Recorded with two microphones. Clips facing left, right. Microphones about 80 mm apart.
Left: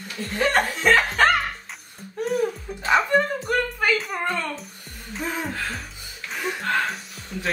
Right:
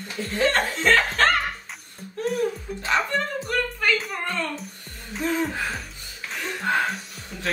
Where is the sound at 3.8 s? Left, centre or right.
Centre.